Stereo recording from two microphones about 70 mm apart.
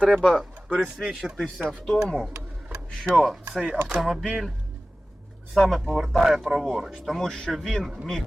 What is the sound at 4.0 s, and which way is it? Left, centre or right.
Speech, centre.